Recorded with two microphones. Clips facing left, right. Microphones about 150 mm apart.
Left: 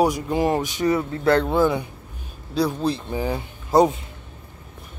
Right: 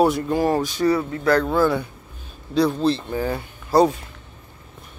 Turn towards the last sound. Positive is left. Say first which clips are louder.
# even
turn(degrees=20)  # may be behind; listen again after turning